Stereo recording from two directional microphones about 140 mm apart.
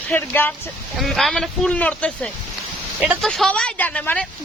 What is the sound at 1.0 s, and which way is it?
A woman's voice, centre (ahead or behind).